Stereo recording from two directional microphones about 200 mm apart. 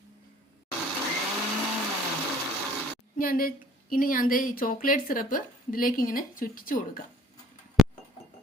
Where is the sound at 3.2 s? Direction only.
45° left (ahead or behind).